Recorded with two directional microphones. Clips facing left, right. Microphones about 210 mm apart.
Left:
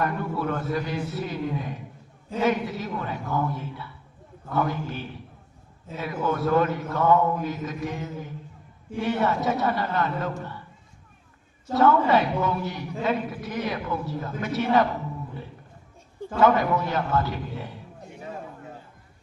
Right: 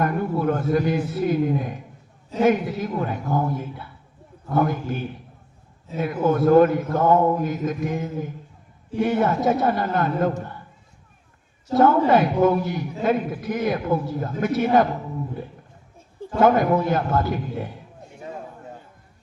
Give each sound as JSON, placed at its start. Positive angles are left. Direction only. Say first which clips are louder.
{"t": 0.0, "sound": "a man's voice", "louder": "right 5 dB", "side_deg": -50}
{"t": 11.8, "sound": "a man's voice", "louder": "right 3 dB", "side_deg": -50}
{"t": 16.4, "sound": "a man's voice", "louder": "right 3 dB", "side_deg": -50}